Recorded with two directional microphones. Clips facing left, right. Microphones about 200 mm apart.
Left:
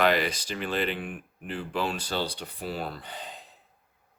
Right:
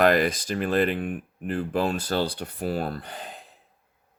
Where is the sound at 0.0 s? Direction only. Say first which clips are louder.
Right 4 dB; 50° right (ahead or behind).